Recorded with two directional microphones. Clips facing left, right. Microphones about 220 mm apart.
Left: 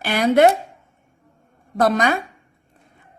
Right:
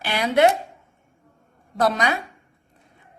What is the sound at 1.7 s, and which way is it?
Speech, 50° left (ahead or behind).